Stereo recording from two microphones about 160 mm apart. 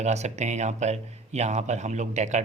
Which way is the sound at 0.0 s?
45° right (ahead or behind).